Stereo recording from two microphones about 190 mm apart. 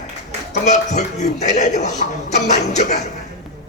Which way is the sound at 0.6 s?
40° left (ahead or behind).